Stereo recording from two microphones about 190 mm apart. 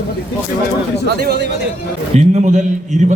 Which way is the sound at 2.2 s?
40° right (ahead or behind).